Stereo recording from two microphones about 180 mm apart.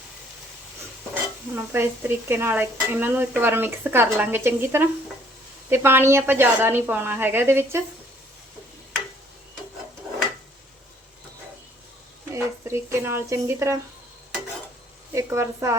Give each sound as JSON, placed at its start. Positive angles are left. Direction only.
{"t": 1.1, "sound": "stir", "side_deg": -10}
{"t": 12.3, "sound": "stir", "side_deg": -15}
{"t": 15.1, "sound": "stir", "side_deg": -15}